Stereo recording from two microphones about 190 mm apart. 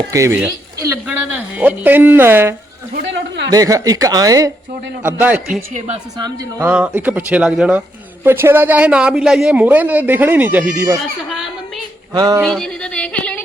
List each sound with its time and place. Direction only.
0.1 s speech: 15° right (ahead or behind)
2.9 s speech: 65° right (ahead or behind)
3.5 s speech: 20° right (ahead or behind)
6.1 s speech: 20° right (ahead or behind)
12.1 s speech: 20° right (ahead or behind)
12.4 s speech: 5° left (ahead or behind)